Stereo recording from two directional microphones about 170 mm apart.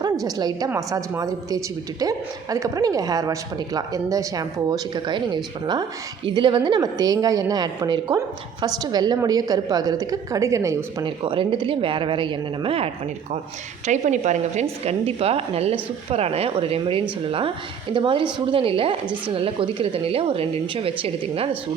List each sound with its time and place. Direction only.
0.0 s a woman's voice: 20° right (ahead or behind)
11.0 s a woman's voice: 30° right (ahead or behind)
13.8 s a woman's voice: 45° right (ahead or behind)